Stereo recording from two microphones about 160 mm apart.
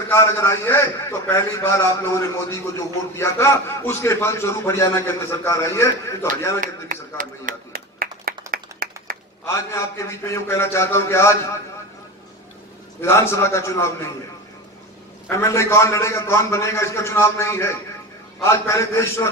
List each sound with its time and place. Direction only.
0.1 s a man's voice: 15° left (ahead or behind)
6.6 s a sound: 55° right (ahead or behind)
9.5 s a man's voice: 15° left (ahead or behind)
13.0 s a man's voice: 15° left (ahead or behind)
15.2 s a man's voice: 20° left (ahead or behind)